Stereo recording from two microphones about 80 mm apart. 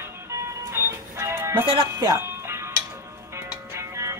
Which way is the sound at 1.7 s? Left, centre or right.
Right.